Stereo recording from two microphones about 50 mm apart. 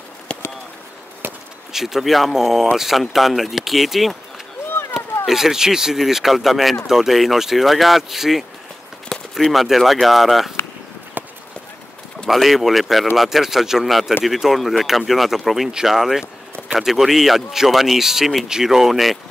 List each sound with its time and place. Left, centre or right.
1.7 s speech: centre
11.2 s run: right
12.3 s speech: centre